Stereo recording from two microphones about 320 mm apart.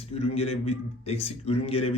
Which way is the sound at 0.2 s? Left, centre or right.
Centre.